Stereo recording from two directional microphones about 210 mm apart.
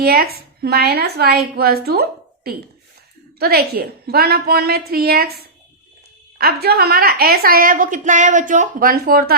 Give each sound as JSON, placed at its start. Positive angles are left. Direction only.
{"t": 0.0, "sound": "a woman's voice", "side_deg": -45}